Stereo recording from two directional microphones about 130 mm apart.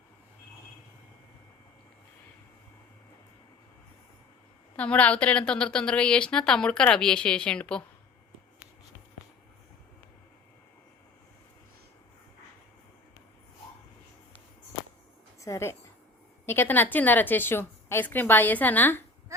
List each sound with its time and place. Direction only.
4.8 s a woman's voice: 10° left (ahead or behind)
15.4 s a sound: 20° left (ahead or behind)
16.5 s a woman's voice: 15° left (ahead or behind)